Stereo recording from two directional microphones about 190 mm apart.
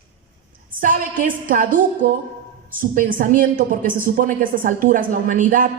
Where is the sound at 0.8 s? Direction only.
45° right (ahead or behind).